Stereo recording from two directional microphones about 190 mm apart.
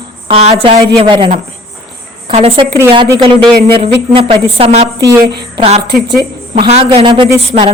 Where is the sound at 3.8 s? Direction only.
30° right (ahead or behind).